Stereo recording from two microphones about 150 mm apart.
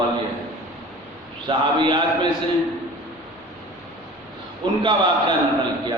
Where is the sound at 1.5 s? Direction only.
30° right (ahead or behind).